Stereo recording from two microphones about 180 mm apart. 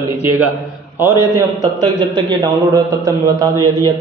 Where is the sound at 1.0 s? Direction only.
15° right (ahead or behind).